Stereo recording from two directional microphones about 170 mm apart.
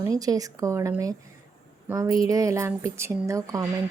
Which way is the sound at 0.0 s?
20° right (ahead or behind).